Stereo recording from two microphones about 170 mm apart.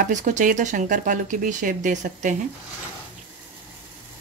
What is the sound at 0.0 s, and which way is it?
Speech, 45° right (ahead or behind).